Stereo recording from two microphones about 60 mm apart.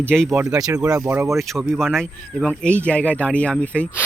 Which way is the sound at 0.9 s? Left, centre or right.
Right.